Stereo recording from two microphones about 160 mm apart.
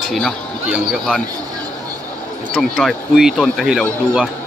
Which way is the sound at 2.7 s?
Centre (ahead or behind).